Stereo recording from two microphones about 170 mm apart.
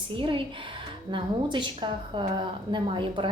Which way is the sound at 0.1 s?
30° right (ahead or behind).